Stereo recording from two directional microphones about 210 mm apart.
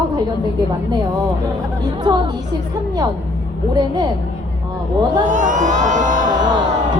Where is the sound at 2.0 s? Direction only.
20° right (ahead or behind).